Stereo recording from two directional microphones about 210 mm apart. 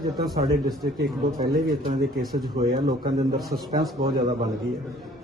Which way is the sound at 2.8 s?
50° right (ahead or behind).